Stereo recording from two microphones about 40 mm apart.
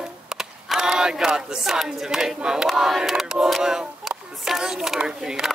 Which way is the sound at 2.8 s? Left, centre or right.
Centre.